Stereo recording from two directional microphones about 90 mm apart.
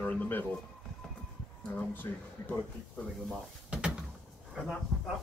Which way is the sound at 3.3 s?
10° right (ahead or behind).